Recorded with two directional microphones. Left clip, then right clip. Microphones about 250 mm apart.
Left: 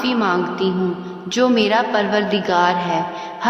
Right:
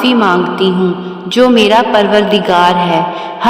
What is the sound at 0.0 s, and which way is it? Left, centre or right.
A woman's voice, right.